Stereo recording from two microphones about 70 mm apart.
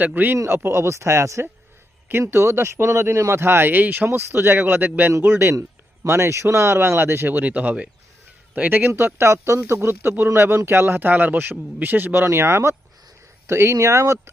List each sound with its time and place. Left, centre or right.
0.0 s speech: right
0.3 s a man's voice: right
8.9 s a man's voice: right